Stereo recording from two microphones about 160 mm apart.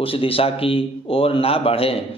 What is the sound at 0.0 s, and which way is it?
A man's voice, 35° left (ahead or behind).